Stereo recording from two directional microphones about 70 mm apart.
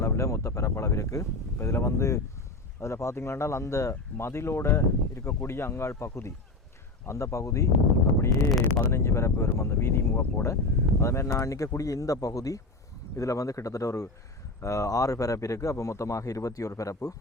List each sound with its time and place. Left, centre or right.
0.0 s a man's voice: left
8.8 s a man's voice: left